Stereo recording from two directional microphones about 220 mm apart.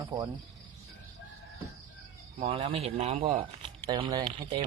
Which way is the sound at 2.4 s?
30° right (ahead or behind).